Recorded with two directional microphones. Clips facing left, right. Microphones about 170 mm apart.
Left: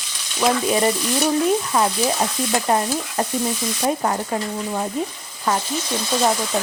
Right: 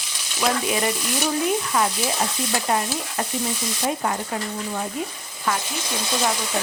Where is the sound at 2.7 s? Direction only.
35° left (ahead or behind).